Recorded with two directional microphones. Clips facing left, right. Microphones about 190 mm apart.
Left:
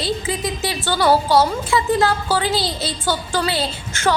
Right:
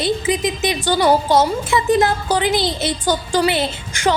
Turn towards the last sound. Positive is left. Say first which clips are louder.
# right 2 dB
turn(degrees=-20)  # may be behind; listen again after turning